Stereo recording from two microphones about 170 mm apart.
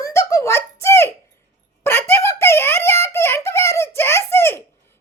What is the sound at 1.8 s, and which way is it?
Giggle, 15° left (ahead or behind).